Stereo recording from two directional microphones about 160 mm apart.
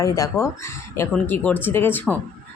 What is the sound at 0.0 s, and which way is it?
Speech, 20° left (ahead or behind).